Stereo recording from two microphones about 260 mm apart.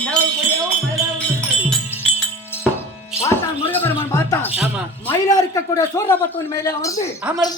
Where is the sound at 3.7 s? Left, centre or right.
Centre.